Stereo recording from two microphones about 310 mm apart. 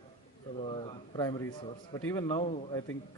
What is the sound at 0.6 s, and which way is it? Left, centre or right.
A man's voice, centre.